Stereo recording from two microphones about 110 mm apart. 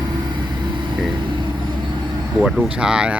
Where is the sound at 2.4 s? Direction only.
Centre (ahead or behind).